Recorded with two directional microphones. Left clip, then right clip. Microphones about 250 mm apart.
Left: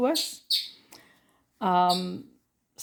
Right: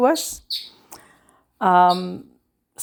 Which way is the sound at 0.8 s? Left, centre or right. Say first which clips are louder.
Right 7 dB; centre.